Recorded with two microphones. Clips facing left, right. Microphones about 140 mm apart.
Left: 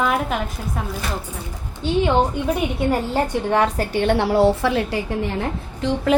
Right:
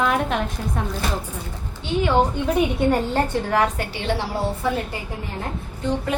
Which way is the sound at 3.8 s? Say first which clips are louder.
Left 6 dB; 50° left (ahead or behind).